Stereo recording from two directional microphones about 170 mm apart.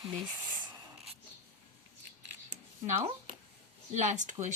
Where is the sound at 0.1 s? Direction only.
25° right (ahead or behind).